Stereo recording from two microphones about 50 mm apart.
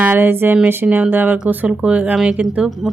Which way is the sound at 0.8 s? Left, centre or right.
Right.